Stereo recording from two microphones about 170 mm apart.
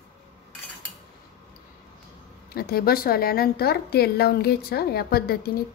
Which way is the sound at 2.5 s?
65° left (ahead or behind).